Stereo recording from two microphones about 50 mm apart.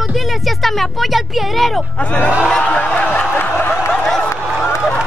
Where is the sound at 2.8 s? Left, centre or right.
Left.